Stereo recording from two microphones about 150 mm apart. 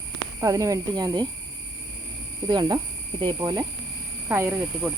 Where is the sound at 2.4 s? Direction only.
25° right (ahead or behind).